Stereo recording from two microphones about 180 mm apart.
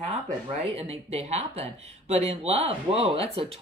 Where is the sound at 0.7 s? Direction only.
35° right (ahead or behind).